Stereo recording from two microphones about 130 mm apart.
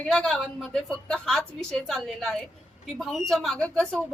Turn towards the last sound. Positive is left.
turn(degrees=5)  # may be behind; listen again after turning